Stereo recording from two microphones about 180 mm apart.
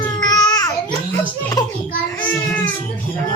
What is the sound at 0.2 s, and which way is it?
Babbling, 20° left (ahead or behind).